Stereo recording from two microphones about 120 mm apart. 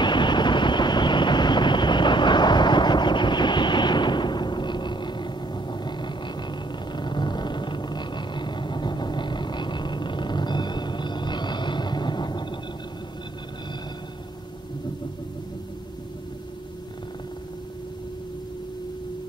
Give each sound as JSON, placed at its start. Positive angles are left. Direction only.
{"t": 0.0, "sound": "vehicle", "side_deg": 40}